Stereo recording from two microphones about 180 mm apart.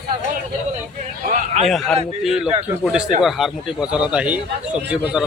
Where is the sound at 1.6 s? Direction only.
Centre (ahead or behind).